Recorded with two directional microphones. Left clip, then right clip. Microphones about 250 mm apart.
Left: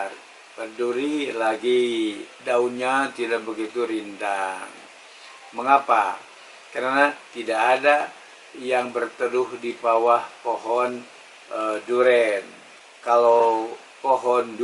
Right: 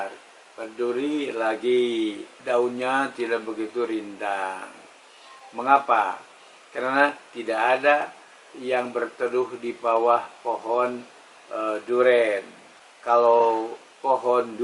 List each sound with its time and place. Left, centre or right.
0.6 s speech: centre
11.5 s speech: centre